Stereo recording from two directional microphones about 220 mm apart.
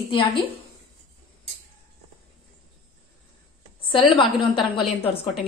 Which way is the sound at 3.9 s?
25° left (ahead or behind).